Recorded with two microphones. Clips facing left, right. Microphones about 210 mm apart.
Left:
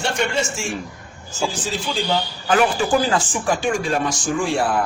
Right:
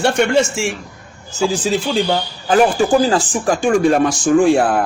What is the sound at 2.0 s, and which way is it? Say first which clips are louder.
Speech: right 3 dB; 40° right (ahead or behind).